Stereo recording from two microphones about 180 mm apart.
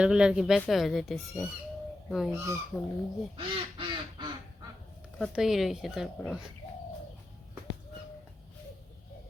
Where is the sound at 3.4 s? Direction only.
25° right (ahead or behind).